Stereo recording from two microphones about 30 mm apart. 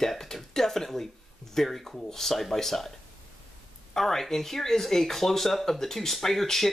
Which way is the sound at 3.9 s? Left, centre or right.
Centre.